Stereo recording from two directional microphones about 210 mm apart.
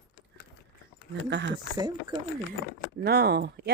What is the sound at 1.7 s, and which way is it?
Speech, 20° right (ahead or behind).